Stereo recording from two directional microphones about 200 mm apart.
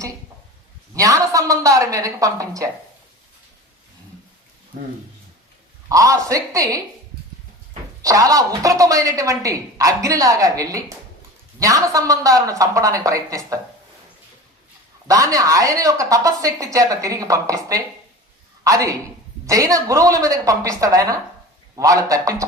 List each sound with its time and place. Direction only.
0.9 s a woman's voice: 15° right (ahead or behind)
5.9 s a woman's voice: 15° right (ahead or behind)
8.0 s a woman's voice: 15° right (ahead or behind)
15.0 s a woman's voice: 15° right (ahead or behind)